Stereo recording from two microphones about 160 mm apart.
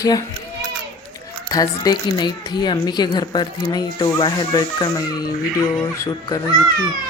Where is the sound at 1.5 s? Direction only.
25° left (ahead or behind).